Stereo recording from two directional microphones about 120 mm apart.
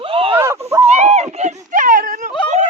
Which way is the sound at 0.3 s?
20° right (ahead or behind).